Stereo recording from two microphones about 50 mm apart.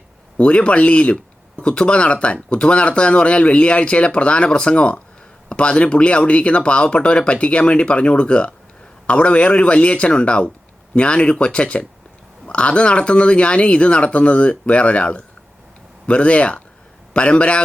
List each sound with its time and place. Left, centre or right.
0.3 s speech: left